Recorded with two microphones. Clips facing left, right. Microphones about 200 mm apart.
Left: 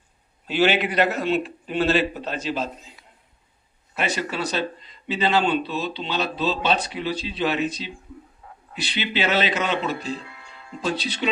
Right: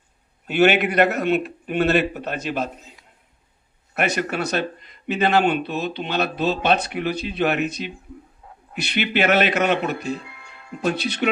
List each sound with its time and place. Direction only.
0.4 s speech: 60° right (ahead or behind)
3.9 s speech: 60° right (ahead or behind)